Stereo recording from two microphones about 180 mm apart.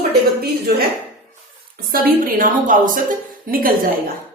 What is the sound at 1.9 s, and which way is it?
A woman's voice, 50° right (ahead or behind).